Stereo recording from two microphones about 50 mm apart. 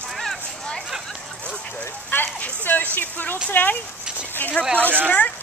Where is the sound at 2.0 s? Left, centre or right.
Left.